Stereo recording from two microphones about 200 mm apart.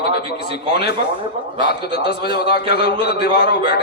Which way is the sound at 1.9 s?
55° left (ahead or behind).